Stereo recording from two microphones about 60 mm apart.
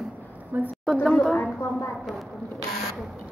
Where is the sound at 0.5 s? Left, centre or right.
Right.